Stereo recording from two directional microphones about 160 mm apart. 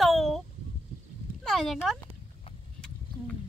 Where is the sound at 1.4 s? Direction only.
Centre (ahead or behind).